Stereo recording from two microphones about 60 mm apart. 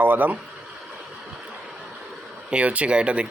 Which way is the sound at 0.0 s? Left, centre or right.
Right.